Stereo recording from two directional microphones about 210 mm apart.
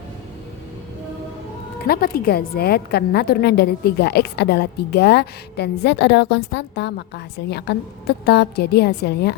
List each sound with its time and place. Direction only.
1.9 s a woman's voice: 45° left (ahead or behind)